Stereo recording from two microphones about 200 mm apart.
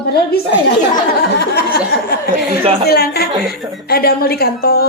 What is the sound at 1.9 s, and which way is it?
A woman's voice, 55° left (ahead or behind).